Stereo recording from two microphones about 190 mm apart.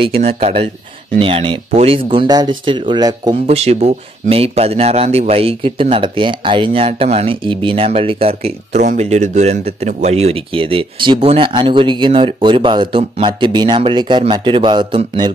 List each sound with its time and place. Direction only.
0.4 s speech: 30° right (ahead or behind)
3.4 s speech: 35° right (ahead or behind)